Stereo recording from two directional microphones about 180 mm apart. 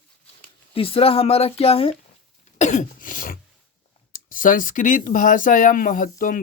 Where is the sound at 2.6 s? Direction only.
40° left (ahead or behind).